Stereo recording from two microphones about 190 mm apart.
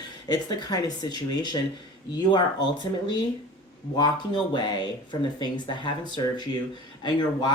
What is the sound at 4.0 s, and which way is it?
Speech, 25° left (ahead or behind).